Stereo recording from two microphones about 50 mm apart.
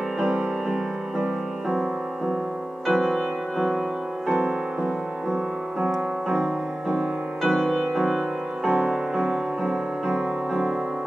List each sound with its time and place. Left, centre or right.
0.2 s music: centre